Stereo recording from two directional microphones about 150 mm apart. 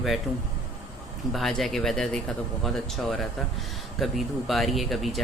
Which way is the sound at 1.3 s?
Centre (ahead or behind).